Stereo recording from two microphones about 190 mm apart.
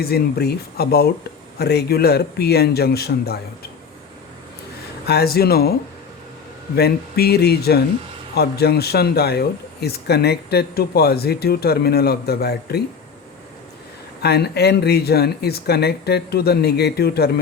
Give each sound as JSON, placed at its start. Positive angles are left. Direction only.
{"t": 0.0, "sound": "speech", "side_deg": 55}
{"t": 5.0, "sound": "speech", "side_deg": 55}
{"t": 6.7, "sound": "speech", "side_deg": 55}
{"t": 14.2, "sound": "speech", "side_deg": 60}